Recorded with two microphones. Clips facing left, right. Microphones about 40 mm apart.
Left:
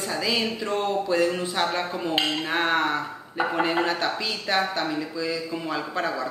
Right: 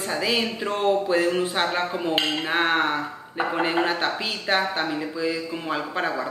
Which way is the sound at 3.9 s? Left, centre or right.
Right.